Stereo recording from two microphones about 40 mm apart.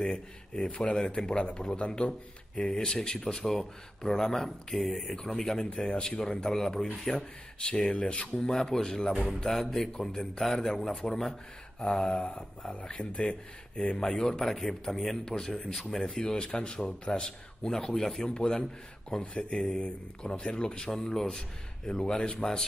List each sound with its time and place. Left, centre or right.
0.0 s a man's voice: left
2.7 s a man's voice: centre
5.1 s a man's voice: centre
7.9 s a man's voice: left
8.4 s a man's voice: centre
14.4 s a man's voice: centre
20.9 s a man's voice: centre